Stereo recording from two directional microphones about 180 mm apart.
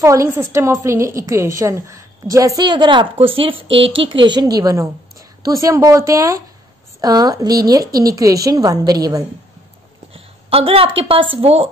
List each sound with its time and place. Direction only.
0.0 s a woman's voice: 15° right (ahead or behind)
10.1 s a sound: 30° right (ahead or behind)
11.0 s a woman's voice: 30° right (ahead or behind)